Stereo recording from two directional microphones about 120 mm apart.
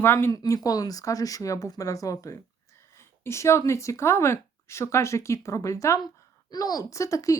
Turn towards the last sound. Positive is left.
turn(degrees=25)  # may be behind; listen again after turning